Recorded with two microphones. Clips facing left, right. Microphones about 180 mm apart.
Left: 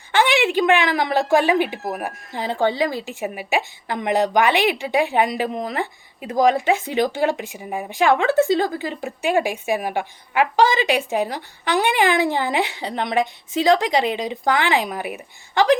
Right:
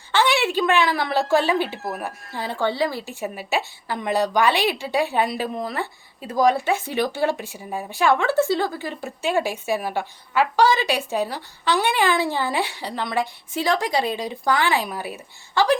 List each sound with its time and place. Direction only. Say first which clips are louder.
0.1 s speech: left 2 dB; 15° left (ahead or behind)